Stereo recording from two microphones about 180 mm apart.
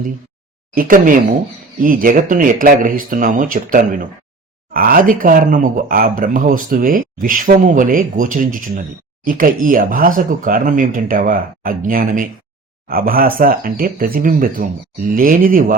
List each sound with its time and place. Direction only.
0.8 s speech: 50° right (ahead or behind)